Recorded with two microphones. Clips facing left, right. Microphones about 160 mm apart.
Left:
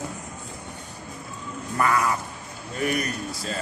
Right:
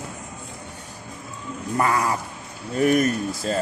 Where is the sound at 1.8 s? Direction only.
30° right (ahead or behind).